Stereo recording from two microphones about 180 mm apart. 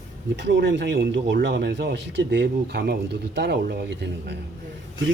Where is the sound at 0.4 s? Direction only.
85° right.